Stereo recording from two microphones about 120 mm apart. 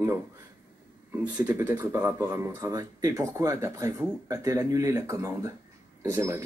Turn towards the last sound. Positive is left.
turn(degrees=-20)  # may be behind; listen again after turning